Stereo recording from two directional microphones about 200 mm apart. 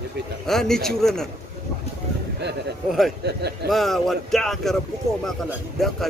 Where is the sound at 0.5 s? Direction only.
Centre (ahead or behind).